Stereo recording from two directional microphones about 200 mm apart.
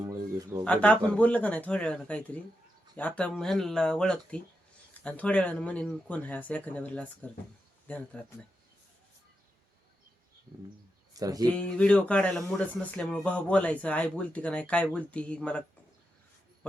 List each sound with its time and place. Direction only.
0.0 s speech: 15° right (ahead or behind)
0.6 s speech: 5° left (ahead or behind)
11.1 s speech: 20° right (ahead or behind)
11.4 s speech: 5° left (ahead or behind)